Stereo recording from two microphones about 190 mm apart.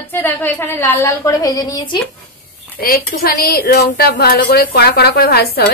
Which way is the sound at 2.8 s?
50° left (ahead or behind).